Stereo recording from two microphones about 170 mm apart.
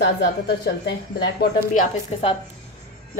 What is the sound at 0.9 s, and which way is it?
Speech, 80° left.